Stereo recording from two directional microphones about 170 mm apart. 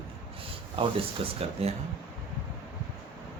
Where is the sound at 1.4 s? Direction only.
35° right (ahead or behind).